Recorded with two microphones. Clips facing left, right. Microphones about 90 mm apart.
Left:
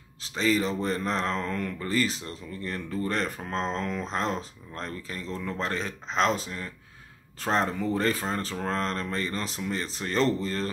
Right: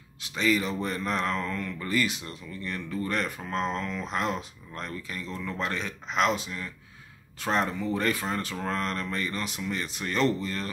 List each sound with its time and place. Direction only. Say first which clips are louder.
0.2 s speech: left 1 dB; 35° left (ahead or behind)